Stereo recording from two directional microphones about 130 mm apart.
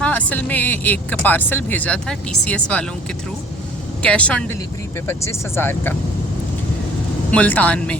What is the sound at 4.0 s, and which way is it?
Speech, 10° left (ahead or behind).